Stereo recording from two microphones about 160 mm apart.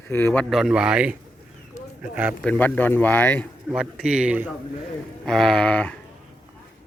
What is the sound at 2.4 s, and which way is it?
A man's voice, 10° left (ahead or behind).